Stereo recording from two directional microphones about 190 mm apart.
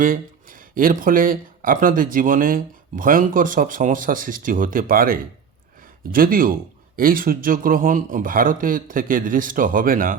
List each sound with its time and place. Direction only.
0.0 s speech: 45° right (ahead or behind)